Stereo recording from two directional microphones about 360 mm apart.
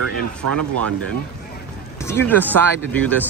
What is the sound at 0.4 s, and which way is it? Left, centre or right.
Speech, right.